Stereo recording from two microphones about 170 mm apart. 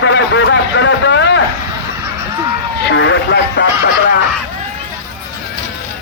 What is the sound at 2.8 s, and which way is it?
Speech, 90° left.